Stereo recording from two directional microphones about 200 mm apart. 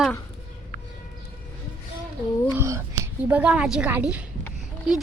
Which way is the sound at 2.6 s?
15° right (ahead or behind).